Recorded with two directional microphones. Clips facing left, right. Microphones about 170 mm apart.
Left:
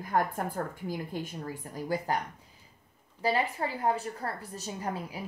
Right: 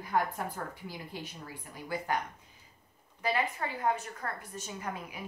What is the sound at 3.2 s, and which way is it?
A woman's voice, 30° left (ahead or behind).